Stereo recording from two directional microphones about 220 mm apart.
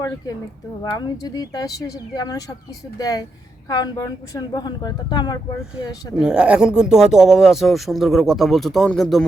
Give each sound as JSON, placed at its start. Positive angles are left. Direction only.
{"t": 0.9, "sound": "speech", "side_deg": 20}
{"t": 6.1, "sound": "speech", "side_deg": -5}